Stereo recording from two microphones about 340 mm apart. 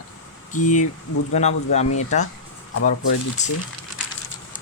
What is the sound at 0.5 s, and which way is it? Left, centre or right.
Speech, left.